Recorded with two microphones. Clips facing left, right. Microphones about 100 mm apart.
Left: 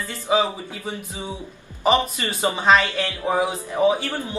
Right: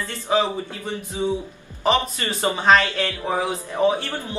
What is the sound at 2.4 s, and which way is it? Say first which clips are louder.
A man's voice: even; 5° left (ahead or behind).